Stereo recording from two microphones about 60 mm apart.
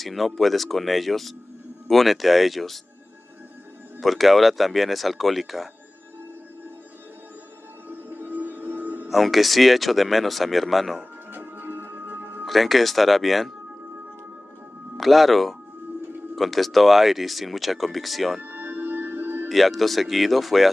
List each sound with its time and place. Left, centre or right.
0.0 s speech: centre
4.0 s speech: centre
7.9 s music: right
9.1 s speech: centre
11.3 s music: right
12.4 s speech: centre
15.0 s speech: centre
18.4 s music: right
19.5 s speech: centre